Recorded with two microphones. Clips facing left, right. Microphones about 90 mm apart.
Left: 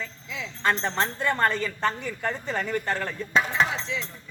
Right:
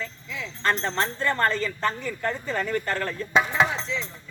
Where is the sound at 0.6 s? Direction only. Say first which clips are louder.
Even; 15° left (ahead or behind).